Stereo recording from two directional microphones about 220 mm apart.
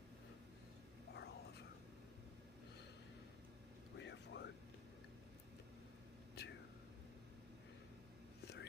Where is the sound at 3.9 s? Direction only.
55° left (ahead or behind).